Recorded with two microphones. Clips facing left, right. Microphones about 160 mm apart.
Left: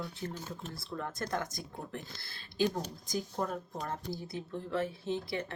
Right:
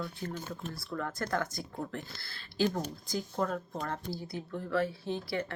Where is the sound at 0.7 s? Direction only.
20° left (ahead or behind).